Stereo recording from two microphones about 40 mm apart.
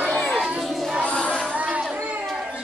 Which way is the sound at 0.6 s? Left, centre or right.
Centre.